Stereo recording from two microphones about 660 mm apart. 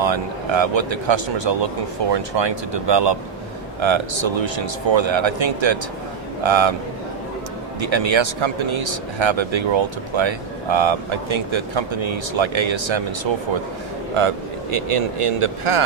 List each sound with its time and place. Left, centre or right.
0.0 s speech: right
7.8 s speech: right
14.1 s speech: right